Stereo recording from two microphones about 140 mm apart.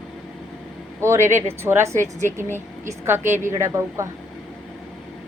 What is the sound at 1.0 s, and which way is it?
A woman's voice, 20° right (ahead or behind).